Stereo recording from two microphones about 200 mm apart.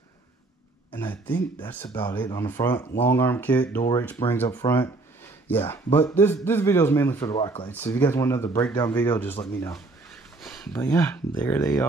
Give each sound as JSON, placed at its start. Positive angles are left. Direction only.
{"t": 0.9, "sound": "speech", "side_deg": 10}
{"t": 3.7, "sound": "speech", "side_deg": 20}
{"t": 7.3, "sound": "speech", "side_deg": 30}
{"t": 7.6, "sound": "speech", "side_deg": 10}
{"t": 9.7, "sound": "a sound", "side_deg": 0}
{"t": 10.8, "sound": "speech", "side_deg": 15}